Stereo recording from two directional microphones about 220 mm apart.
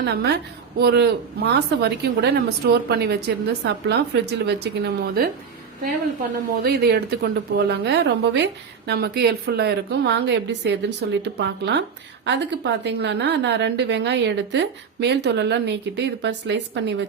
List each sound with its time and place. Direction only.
0.0 s a woman's voice: 50° right (ahead or behind)
6.6 s a woman's voice: 45° right (ahead or behind)